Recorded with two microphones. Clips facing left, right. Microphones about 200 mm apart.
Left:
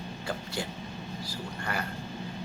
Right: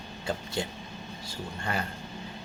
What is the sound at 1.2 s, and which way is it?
Speech, 25° right (ahead or behind).